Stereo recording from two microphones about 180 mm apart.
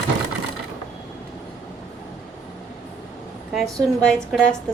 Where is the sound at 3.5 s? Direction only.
Centre (ahead or behind).